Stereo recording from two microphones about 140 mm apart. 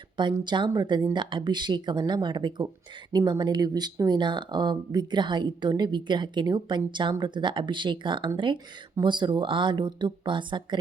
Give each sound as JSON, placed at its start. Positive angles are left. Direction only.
{"t": 0.2, "sound": "speech", "side_deg": -35}